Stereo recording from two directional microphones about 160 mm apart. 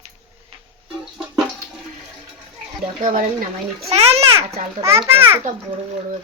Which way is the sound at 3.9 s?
40° right (ahead or behind).